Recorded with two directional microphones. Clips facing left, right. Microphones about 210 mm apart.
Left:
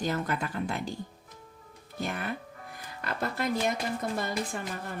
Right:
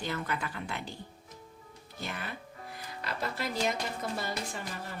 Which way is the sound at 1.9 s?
50° left (ahead or behind).